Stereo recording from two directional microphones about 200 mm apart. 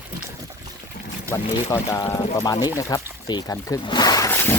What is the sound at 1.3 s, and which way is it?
Speech, 15° left (ahead or behind).